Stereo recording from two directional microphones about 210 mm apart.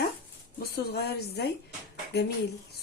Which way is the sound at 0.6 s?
50° left (ahead or behind).